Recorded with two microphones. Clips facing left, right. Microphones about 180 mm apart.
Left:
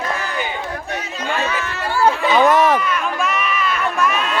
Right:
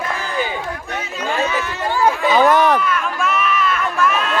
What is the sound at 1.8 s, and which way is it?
Chatter, 15° right (ahead or behind).